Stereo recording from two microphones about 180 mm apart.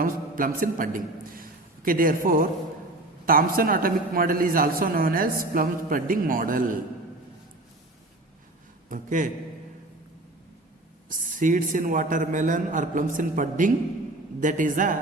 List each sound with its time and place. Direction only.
0.0 s a man's voice: 50° right (ahead or behind)
8.9 s a man's voice: 45° right (ahead or behind)
11.1 s a man's voice: 45° right (ahead or behind)